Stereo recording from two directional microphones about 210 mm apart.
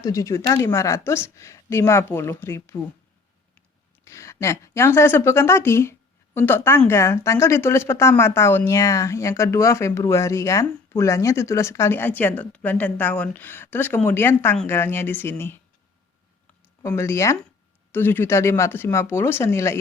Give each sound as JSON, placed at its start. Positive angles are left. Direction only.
{"t": 0.0, "sound": "a woman's voice", "side_deg": 15}
{"t": 4.0, "sound": "a woman's voice", "side_deg": 15}
{"t": 16.8, "sound": "a woman's voice", "side_deg": 15}